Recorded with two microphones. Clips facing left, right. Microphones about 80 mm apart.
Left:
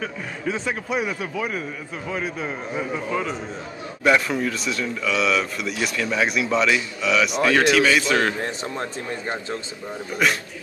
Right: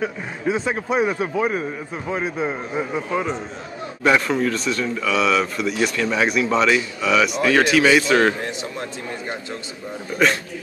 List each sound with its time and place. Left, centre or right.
0.0 s a man's voice: centre
0.8 s a man's voice: right
4.0 s a man's voice: centre